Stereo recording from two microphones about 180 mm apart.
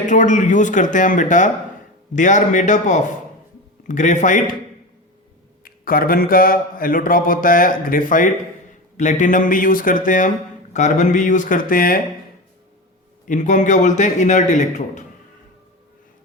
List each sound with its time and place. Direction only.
0.0 s speech: 45° left (ahead or behind)
5.6 s speech: 55° left (ahead or behind)
13.2 s speech: 45° left (ahead or behind)